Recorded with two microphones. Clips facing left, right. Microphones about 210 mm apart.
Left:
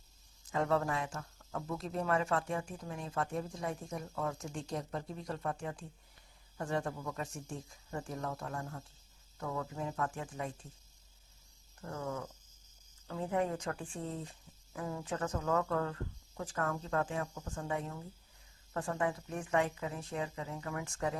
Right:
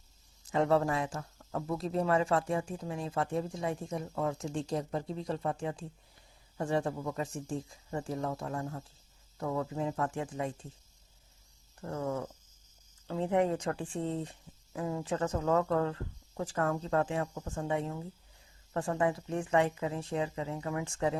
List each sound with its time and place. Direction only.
0.5 s speech: 30° right (ahead or behind)
11.8 s speech: 30° right (ahead or behind)